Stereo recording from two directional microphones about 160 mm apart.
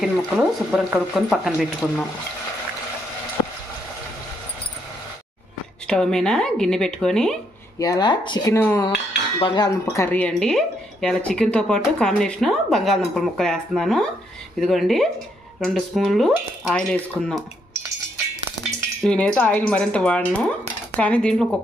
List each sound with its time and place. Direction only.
0.0 s speech: centre (ahead or behind)
5.9 s speech: 5° left (ahead or behind)
7.8 s speech: 25° left (ahead or behind)
8.5 s speech: 15° left (ahead or behind)
19.0 s speech: 5° left (ahead or behind)